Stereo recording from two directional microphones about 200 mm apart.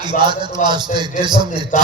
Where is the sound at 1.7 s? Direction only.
40° left (ahead or behind).